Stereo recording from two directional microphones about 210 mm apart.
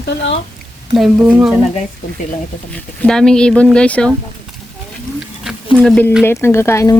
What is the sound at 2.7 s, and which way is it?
Speech, 5° left (ahead or behind).